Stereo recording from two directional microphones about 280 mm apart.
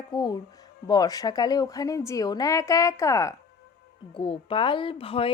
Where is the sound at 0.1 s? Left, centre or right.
Centre.